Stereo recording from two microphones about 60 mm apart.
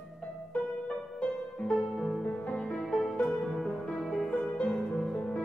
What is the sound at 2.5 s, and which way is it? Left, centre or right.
Music, centre.